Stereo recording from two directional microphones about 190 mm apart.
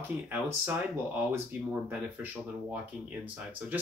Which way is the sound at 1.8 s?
10° right (ahead or behind).